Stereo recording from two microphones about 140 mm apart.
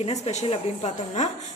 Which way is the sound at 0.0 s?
55° left (ahead or behind).